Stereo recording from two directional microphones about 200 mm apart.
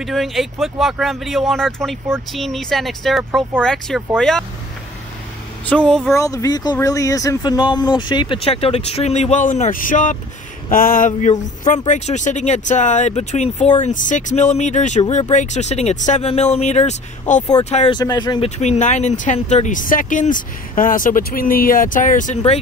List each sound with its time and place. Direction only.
0.0 s speech: centre (ahead or behind)
5.7 s speech: 5° left (ahead or behind)
6.1 s speech: 15° left (ahead or behind); by 17.9 s 35° left (ahead or behind)
17.9 s speech: 20° left (ahead or behind)
18.6 s speech: 35° left (ahead or behind)